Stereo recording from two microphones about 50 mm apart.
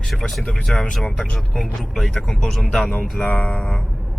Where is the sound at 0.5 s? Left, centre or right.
Centre.